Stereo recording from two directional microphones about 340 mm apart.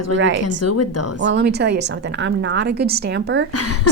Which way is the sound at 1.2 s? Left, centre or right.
Right.